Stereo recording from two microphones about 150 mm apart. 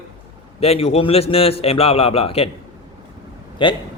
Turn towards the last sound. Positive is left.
turn(degrees=30)  # may be behind; listen again after turning